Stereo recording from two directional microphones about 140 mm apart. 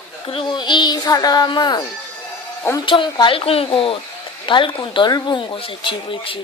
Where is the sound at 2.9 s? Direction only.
35° left (ahead or behind).